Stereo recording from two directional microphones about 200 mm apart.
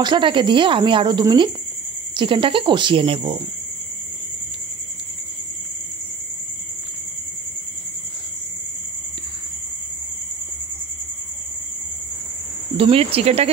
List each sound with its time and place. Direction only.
0.0 s speech: 25° right (ahead or behind)
12.7 s speech: 30° right (ahead or behind)